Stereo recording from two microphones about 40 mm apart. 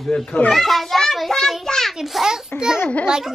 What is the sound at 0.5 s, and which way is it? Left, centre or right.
Speech, centre.